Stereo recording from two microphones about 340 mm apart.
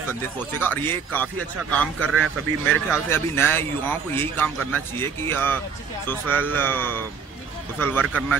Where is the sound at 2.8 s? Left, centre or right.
Centre.